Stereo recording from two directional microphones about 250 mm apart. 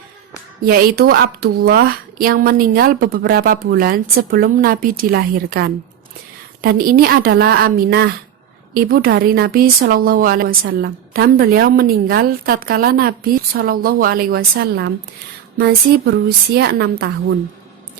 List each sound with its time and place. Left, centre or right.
0.6 s speech: right